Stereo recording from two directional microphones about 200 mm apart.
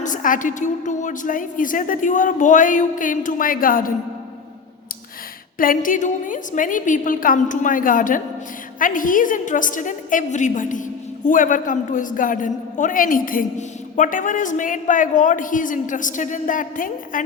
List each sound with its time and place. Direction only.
0.0 s a woman's voice: 40° left (ahead or behind)
5.5 s a woman's voice: 45° left (ahead or behind)